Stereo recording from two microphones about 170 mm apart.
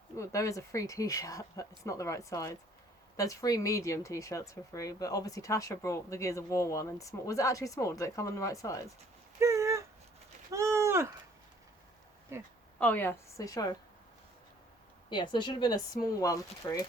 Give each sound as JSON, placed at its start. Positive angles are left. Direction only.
{"t": 0.2, "sound": "speech", "side_deg": 20}
{"t": 9.4, "sound": "a sound", "side_deg": -20}
{"t": 12.3, "sound": "speech", "side_deg": -15}
{"t": 12.8, "sound": "a woman's voice", "side_deg": 10}
{"t": 15.1, "sound": "speech", "side_deg": 25}